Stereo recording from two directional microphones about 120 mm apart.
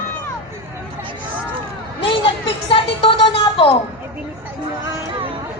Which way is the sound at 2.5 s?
50° left (ahead or behind).